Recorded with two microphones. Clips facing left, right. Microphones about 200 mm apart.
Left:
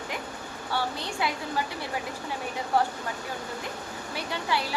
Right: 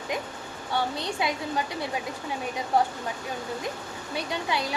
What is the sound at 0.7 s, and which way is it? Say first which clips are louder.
Speech: right 2 dB; 20° right (ahead or behind).